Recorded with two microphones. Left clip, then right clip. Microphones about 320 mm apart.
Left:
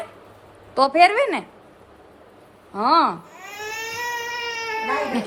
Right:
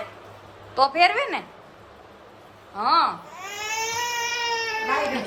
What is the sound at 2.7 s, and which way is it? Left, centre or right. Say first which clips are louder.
Speech: left 3 dB; centre.